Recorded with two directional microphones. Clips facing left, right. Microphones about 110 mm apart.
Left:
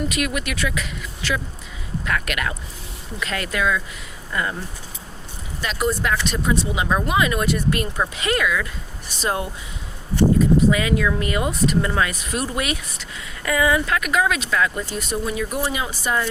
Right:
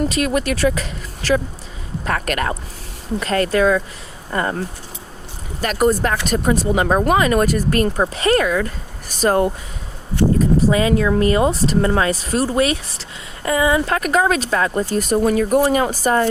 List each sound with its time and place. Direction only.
0.0 s speech: 35° right (ahead or behind)
5.5 s speech: 45° right (ahead or behind)
10.3 s speech: 35° right (ahead or behind)